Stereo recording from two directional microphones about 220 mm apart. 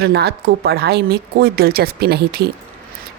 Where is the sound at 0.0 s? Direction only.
50° right (ahead or behind).